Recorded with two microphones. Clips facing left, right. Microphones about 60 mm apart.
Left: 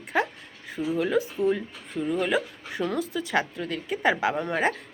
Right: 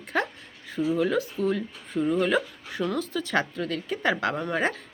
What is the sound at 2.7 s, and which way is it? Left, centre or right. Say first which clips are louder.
Speech: even; left.